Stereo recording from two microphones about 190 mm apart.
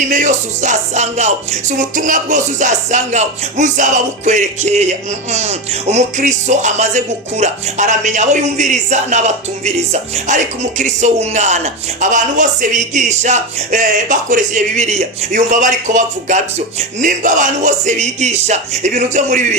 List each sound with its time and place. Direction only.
0.1 s music: 40° right (ahead or behind)